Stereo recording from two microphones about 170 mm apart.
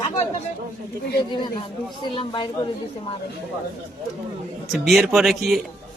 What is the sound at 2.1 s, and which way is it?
Speech, 30° left (ahead or behind).